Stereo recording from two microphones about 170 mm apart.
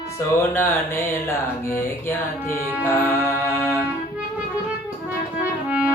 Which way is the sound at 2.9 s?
15° left (ahead or behind).